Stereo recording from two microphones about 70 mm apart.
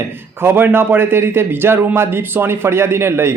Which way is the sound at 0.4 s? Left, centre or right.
Right.